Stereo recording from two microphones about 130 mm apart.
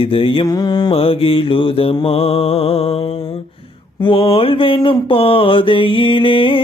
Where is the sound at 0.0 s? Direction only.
45° left (ahead or behind).